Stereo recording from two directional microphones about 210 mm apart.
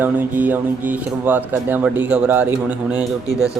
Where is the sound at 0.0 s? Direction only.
10° right (ahead or behind).